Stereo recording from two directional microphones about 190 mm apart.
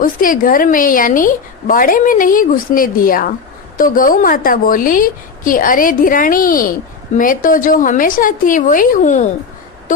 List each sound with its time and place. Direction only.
0.0 s a woman's voice: 45° left (ahead or behind)